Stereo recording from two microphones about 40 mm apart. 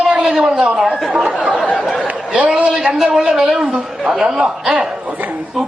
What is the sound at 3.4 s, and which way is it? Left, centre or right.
Speech, right.